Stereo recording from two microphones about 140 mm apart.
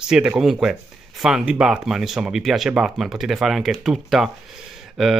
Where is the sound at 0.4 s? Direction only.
5° right (ahead or behind).